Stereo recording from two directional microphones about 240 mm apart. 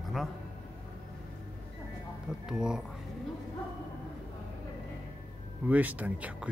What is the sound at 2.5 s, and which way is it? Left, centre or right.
Speech, centre.